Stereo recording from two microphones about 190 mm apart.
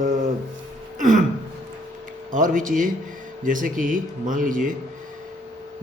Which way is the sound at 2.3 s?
45° right (ahead or behind).